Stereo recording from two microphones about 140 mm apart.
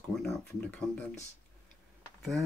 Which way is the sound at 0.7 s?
10° left (ahead or behind).